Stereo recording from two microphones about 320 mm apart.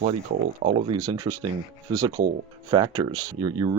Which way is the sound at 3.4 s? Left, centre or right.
Centre.